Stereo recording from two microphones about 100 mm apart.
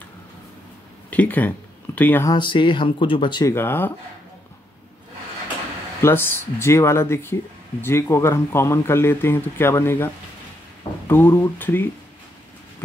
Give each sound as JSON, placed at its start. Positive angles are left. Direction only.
{"t": 1.1, "sound": "speech", "side_deg": 15}
{"t": 2.3, "sound": "speech", "side_deg": 55}
{"t": 3.4, "sound": "speech", "side_deg": 25}
{"t": 6.0, "sound": "speech", "side_deg": 20}